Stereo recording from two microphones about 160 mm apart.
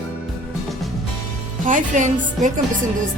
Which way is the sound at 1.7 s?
50° right (ahead or behind).